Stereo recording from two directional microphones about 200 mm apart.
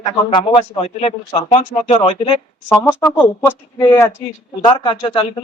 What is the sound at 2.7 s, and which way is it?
Speech, 10° left (ahead or behind).